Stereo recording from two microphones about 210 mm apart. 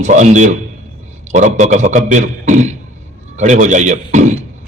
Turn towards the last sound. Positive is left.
turn(degrees=-35)  # may be behind; listen again after turning